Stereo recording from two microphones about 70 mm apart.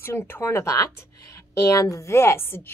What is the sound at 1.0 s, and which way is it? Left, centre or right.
A woman's voice, left.